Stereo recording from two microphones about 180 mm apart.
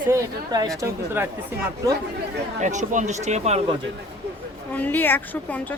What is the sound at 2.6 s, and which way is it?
Speech, 40° right (ahead or behind).